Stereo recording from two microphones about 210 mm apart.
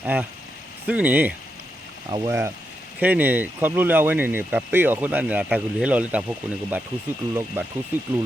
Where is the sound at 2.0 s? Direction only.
20° right (ahead or behind).